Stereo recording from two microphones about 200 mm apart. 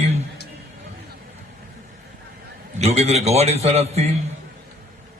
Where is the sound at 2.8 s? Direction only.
30° right (ahead or behind).